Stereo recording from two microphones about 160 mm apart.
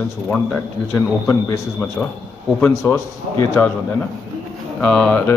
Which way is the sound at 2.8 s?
15° left (ahead or behind).